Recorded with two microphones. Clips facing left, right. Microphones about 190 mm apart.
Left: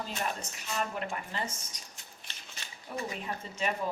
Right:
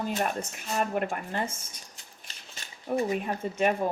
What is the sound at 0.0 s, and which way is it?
Speech, 50° right (ahead or behind).